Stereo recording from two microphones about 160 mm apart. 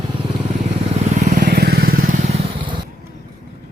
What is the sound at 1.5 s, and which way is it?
Motorcycle, 80° right.